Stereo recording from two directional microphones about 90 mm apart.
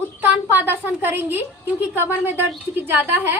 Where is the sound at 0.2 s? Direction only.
20° right (ahead or behind).